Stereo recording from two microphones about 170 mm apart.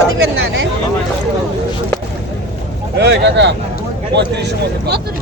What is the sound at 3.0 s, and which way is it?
Speech, 85° right.